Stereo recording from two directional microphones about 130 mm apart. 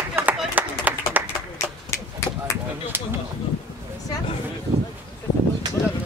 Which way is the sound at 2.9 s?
15° right (ahead or behind).